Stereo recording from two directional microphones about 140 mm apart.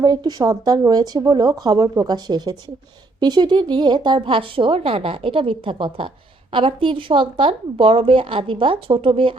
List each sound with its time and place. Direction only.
0.0 s speech: 30° right (ahead or behind)